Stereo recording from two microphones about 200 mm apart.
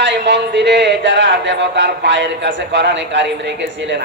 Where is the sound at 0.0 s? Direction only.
60° right (ahead or behind).